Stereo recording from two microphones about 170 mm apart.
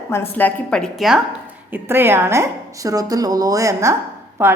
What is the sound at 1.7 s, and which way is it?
A woman's voice, 10° right (ahead or behind).